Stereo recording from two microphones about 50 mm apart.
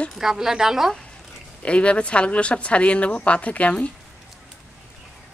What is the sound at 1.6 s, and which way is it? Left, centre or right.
Speech, left.